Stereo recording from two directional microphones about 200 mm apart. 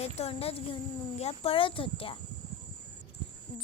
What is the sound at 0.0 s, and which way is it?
Speech, 30° left (ahead or behind).